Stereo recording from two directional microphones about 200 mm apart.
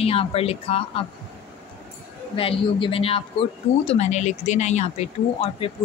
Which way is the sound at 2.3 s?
25° left (ahead or behind).